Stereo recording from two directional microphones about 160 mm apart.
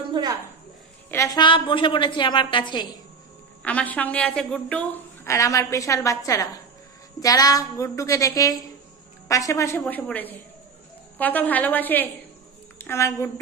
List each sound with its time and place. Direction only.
0.2 s speech: 30° right (ahead or behind)
1.1 s a woman's voice: 20° left (ahead or behind)
1.4 s a woman's voice: 30° left (ahead or behind)
3.6 s a woman's voice: 10° left (ahead or behind)